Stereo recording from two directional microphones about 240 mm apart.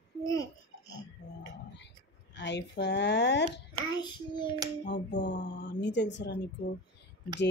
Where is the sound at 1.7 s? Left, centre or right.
Left.